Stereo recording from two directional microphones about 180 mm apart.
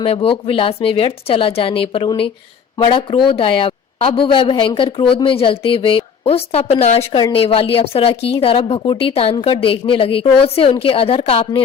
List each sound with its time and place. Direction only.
0.0 s speech: 30° left (ahead or behind)